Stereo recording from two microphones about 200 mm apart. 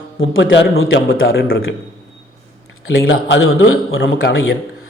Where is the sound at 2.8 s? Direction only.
70° left (ahead or behind).